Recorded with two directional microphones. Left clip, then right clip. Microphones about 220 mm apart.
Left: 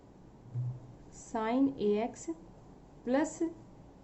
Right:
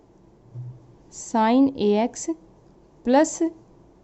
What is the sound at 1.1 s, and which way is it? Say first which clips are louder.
A woman's voice: right 13 dB; 45° right (ahead or behind).